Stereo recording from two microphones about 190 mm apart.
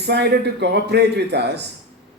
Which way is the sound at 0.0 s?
60° right (ahead or behind).